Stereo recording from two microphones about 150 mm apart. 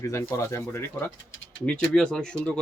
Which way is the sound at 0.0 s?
20° left (ahead or behind).